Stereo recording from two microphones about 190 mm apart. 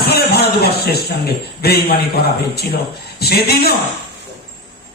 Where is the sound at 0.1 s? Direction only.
55° left (ahead or behind).